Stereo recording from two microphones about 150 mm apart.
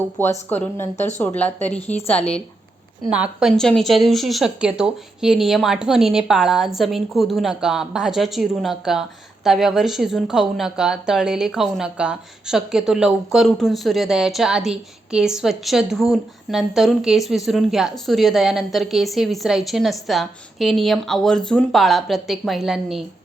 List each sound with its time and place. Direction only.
0.2 s speech: 15° left (ahead or behind)
3.1 s a woman's voice: 10° right (ahead or behind)
3.5 s speech: 5° left (ahead or behind)